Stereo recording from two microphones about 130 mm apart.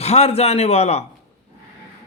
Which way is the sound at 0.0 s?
55° left (ahead or behind).